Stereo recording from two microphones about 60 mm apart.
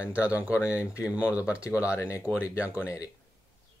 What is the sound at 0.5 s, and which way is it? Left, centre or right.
Speech, left.